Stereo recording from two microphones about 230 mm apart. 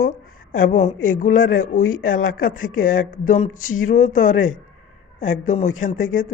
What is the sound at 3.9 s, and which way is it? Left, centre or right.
Speech, left.